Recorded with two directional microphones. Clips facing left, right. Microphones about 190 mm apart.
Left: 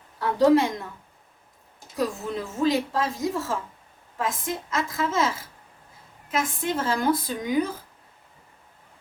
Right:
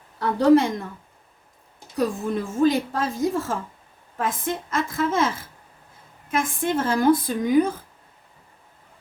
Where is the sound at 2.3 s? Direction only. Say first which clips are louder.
Right 5 dB; 50° right (ahead or behind).